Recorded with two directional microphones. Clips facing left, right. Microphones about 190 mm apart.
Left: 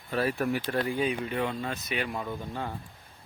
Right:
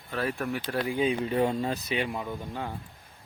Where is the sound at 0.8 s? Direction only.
15° right (ahead or behind); by 1.8 s 30° right (ahead or behind).